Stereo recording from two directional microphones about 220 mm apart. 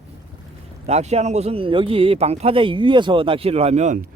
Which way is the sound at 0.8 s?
30° right (ahead or behind).